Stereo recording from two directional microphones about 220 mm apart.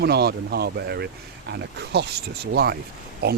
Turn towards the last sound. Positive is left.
turn(degrees=-45)  # may be behind; listen again after turning